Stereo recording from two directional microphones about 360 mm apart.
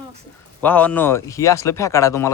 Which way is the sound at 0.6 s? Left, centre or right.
Centre.